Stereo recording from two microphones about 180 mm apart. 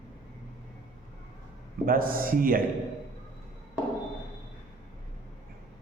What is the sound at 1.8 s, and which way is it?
Speech, 55° right (ahead or behind).